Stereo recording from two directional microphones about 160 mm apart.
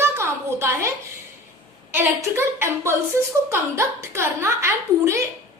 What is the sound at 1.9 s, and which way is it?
A woman's voice, 15° right (ahead or behind).